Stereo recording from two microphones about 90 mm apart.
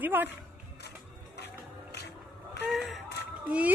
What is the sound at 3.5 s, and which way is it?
Speech, 15° right (ahead or behind).